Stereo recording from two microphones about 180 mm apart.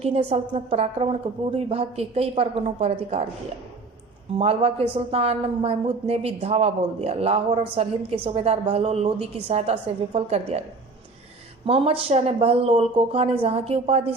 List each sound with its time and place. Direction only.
0.0 s a woman's voice: 35° right (ahead or behind)
4.4 s a woman's voice: 35° right (ahead or behind)
11.6 s a woman's voice: 30° right (ahead or behind)